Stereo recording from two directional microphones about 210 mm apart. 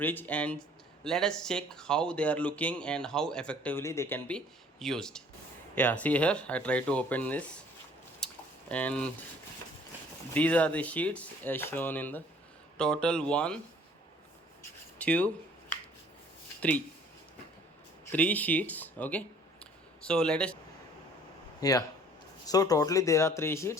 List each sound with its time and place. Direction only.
0.0 s speech: 10° left (ahead or behind)
8.2 s a sound: 5° left (ahead or behind)
8.7 s speech: 5° left (ahead or behind)
10.3 s speech: 5° left (ahead or behind)
14.9 s a sound: 5° left (ahead or behind)
16.6 s speech: 5° left (ahead or behind)
18.1 s speech: 10° left (ahead or behind)
21.6 s speech: 15° left (ahead or behind)